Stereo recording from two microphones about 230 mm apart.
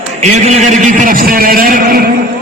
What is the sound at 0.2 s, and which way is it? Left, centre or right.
A man's voice, right.